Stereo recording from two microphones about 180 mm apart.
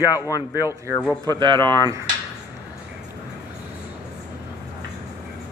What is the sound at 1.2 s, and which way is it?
Speech, 25° right (ahead or behind).